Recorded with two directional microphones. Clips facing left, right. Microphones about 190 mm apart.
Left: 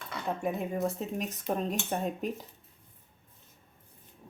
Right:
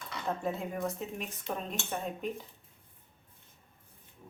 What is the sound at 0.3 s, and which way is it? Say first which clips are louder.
Speech: left 2 dB; 15° left (ahead or behind).